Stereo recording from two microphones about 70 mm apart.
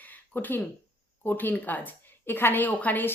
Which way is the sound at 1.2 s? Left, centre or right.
Left.